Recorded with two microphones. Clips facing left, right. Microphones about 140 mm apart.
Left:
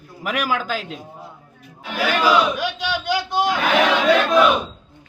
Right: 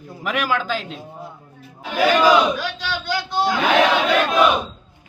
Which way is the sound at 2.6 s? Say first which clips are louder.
Left 3 dB; 15° left (ahead or behind).